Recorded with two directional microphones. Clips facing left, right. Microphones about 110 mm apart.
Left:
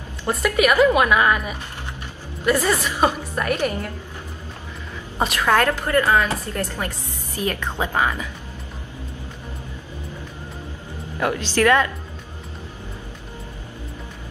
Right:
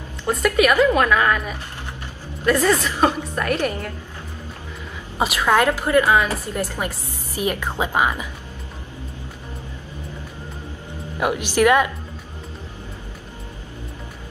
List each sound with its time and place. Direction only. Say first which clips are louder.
0.3 s a woman's voice: right 1 dB; 5° left (ahead or behind)
5.2 s a woman's voice: right 1 dB; 10° right (ahead or behind)
11.1 s a woman's voice: right 2 dB; 15° right (ahead or behind)